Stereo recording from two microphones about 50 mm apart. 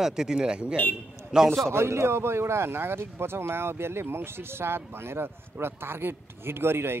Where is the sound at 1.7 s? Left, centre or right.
Right.